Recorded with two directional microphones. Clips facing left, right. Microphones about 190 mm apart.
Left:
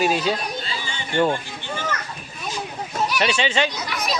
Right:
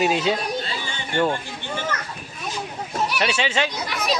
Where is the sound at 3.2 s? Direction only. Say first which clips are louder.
Left 2 dB; 5° right (ahead or behind).